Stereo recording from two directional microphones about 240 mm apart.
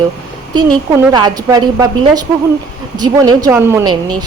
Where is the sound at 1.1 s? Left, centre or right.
Centre.